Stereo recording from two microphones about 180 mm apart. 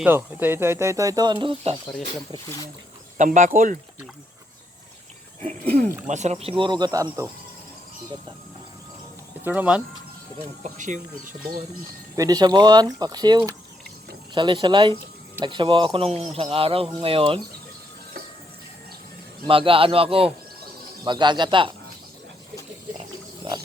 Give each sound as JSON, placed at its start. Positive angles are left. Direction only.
{"t": 0.0, "sound": "speech", "side_deg": -10}
{"t": 3.2, "sound": "speech", "side_deg": -45}
{"t": 5.4, "sound": "speech", "side_deg": -50}
{"t": 6.6, "sound": "speech", "side_deg": -25}
{"t": 9.4, "sound": "speech", "side_deg": -10}
{"t": 10.6, "sound": "speech", "side_deg": -45}
{"t": 12.1, "sound": "speech", "side_deg": -20}
{"t": 19.5, "sound": "speech", "side_deg": -30}